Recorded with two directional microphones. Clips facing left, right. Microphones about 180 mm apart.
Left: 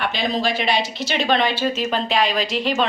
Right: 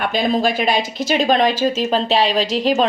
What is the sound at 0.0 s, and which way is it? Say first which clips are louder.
A woman's voice: right 5 dB; 50° right (ahead or behind).